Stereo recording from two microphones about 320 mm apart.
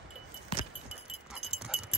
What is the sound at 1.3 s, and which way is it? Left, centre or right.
Sheep, centre.